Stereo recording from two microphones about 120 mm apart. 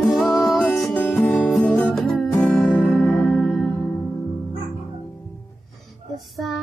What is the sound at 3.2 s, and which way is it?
Music, centre (ahead or behind).